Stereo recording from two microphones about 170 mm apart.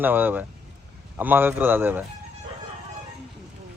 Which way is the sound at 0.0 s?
10° right (ahead or behind).